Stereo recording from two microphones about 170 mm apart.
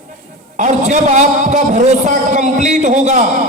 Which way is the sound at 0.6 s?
45° right (ahead or behind).